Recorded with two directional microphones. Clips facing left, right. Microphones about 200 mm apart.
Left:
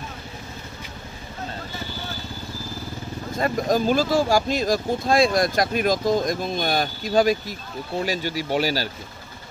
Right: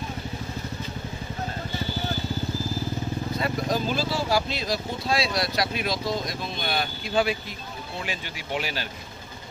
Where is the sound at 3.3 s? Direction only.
45° left (ahead or behind).